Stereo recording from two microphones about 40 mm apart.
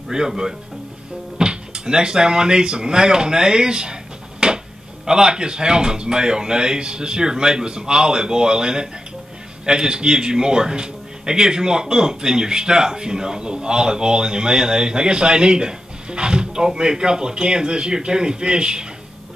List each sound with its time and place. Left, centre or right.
0.1 s speech: centre
4.4 s a sound: centre
5.0 s speech: centre